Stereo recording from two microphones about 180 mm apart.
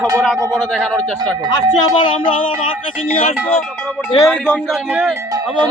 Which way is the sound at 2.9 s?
5° right (ahead or behind).